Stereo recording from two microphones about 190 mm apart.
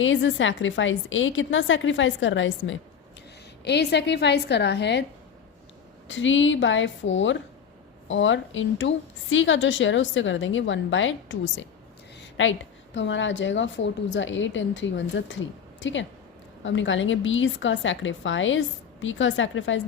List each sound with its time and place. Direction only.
0.0 s a woman's voice: 85° left
3.6 s a woman's voice: 60° left (ahead or behind)
6.1 s a woman's voice: 80° left